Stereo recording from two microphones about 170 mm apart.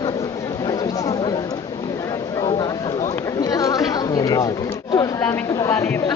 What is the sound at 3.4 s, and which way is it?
Chatter, 20° left (ahead or behind).